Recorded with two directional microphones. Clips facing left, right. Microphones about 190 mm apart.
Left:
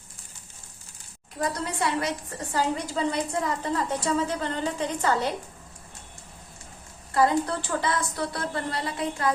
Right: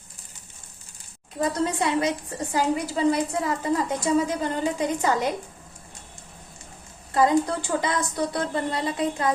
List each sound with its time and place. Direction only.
1.4 s a woman's voice: 20° right (ahead or behind)
7.1 s a woman's voice: 20° right (ahead or behind)